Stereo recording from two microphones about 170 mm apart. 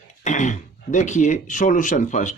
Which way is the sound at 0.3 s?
45° left (ahead or behind).